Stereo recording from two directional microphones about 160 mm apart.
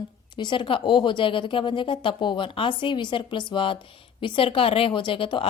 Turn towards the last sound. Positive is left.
turn(degrees=35)  # may be behind; listen again after turning